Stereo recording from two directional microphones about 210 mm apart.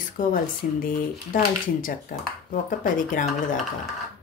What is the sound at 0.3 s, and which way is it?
Speech, 40° left (ahead or behind).